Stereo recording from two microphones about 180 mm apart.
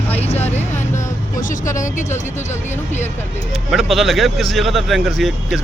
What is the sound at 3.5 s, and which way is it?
Speech, centre (ahead or behind).